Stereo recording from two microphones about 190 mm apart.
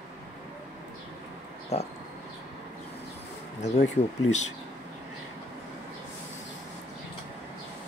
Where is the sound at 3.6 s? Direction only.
35° left (ahead or behind).